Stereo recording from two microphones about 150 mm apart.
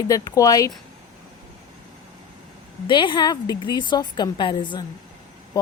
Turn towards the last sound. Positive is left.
turn(degrees=30)  # may be behind; listen again after turning